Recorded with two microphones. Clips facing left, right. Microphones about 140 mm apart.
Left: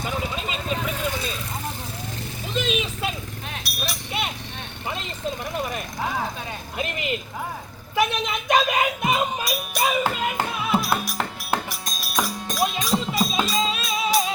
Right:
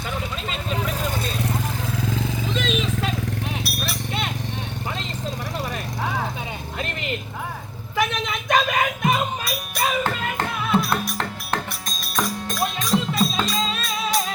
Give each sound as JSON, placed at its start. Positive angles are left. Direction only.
{"t": 2.6, "sound": "vehicle", "side_deg": 10}
{"t": 3.6, "sound": "horse", "side_deg": 0}
{"t": 8.4, "sound": "a sound", "side_deg": 15}
{"t": 9.4, "sound": "music", "side_deg": 0}